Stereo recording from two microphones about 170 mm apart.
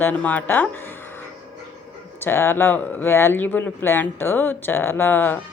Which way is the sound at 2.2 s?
15° left (ahead or behind).